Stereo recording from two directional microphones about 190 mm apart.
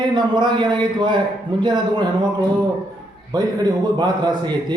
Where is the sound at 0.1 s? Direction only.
25° right (ahead or behind).